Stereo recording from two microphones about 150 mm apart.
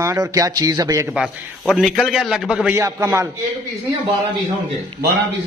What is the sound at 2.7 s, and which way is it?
Speech, 20° right (ahead or behind).